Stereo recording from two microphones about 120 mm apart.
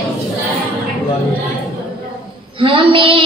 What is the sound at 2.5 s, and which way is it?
Speech, 45° right (ahead or behind).